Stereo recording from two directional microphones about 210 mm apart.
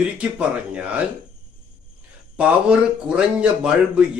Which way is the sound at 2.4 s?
5° right (ahead or behind).